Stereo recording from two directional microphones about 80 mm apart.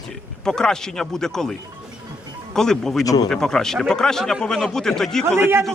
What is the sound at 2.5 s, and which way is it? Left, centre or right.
Speech, centre.